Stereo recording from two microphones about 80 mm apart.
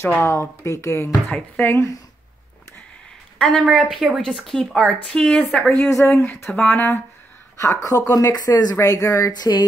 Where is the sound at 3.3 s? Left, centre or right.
Centre.